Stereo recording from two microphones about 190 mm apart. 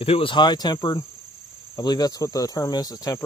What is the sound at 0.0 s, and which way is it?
Cricket, 30° left (ahead or behind).